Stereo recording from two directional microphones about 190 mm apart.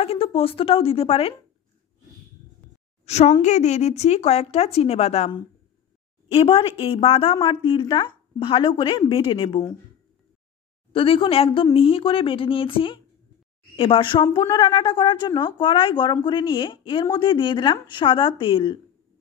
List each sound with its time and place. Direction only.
0.0 s a woman's voice: 30° left (ahead or behind)
3.1 s a woman's voice: 35° left (ahead or behind)
10.9 s a woman's voice: 30° left (ahead or behind)